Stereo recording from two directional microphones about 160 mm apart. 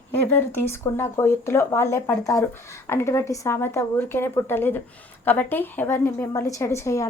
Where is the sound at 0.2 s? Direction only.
15° left (ahead or behind).